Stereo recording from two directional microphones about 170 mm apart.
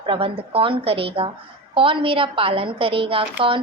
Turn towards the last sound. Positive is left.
turn(degrees=-30)  # may be behind; listen again after turning